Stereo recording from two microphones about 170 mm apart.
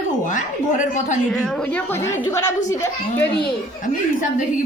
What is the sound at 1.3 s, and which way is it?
A woman's voice, centre (ahead or behind).